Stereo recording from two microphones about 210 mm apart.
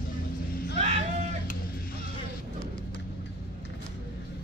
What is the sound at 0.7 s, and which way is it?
Vehicle, 30° right (ahead or behind).